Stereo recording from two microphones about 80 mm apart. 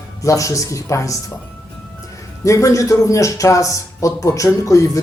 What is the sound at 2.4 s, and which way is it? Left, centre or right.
Speech, left.